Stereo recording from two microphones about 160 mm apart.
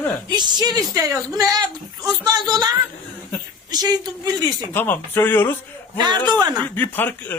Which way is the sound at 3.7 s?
25° right (ahead or behind).